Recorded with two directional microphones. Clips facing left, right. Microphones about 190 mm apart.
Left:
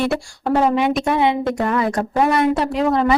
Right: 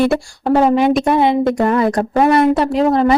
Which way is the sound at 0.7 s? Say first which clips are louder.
Right 5 dB; 35° right (ahead or behind).